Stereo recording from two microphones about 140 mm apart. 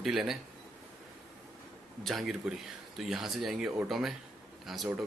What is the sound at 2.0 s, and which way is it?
A man's voice, centre (ahead or behind).